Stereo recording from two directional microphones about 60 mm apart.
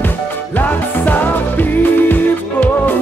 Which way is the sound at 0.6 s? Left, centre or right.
Left.